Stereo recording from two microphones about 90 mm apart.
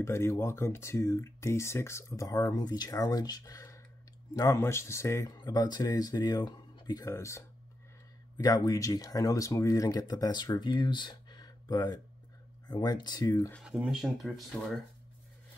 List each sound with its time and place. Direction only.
0.0 s speech: 30° left (ahead or behind)
5.4 s speech: 45° left (ahead or behind)
13.7 s speech: 5° right (ahead or behind)